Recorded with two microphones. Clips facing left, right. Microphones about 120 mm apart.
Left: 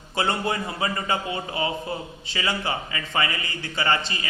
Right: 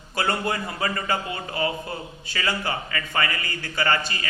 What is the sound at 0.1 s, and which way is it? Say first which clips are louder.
A man's voice: even; 25° left (ahead or behind).